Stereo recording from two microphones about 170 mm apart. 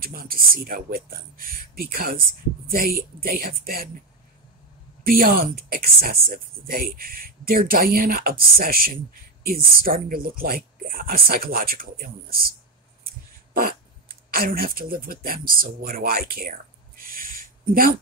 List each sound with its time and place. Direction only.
0.0 s speech: 60° right (ahead or behind)
5.0 s speech: 60° right (ahead or behind)